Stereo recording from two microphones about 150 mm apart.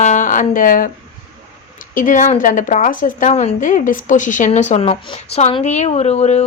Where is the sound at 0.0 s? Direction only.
55° left (ahead or behind).